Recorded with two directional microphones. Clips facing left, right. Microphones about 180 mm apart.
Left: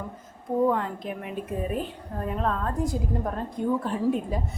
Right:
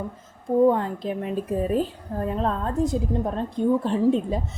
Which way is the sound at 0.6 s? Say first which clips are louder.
Right 5 dB; 30° right (ahead or behind).